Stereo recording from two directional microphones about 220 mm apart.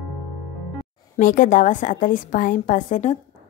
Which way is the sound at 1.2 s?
35° left (ahead or behind).